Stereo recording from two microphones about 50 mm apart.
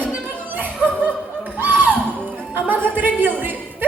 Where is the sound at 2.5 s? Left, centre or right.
Right.